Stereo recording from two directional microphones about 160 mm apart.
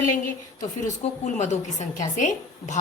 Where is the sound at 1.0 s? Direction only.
45° left (ahead or behind).